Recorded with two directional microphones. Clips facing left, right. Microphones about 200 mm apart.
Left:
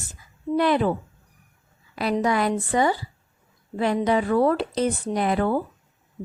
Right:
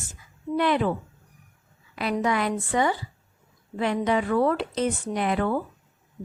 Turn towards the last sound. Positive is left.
turn(degrees=35)  # may be behind; listen again after turning